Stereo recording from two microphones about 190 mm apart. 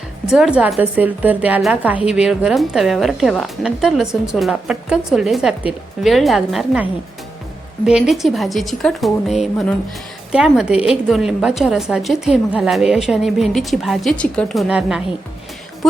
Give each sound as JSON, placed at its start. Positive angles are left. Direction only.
{"t": 0.3, "sound": "a woman's voice", "side_deg": -5}
{"t": 7.9, "sound": "a woman's voice", "side_deg": -5}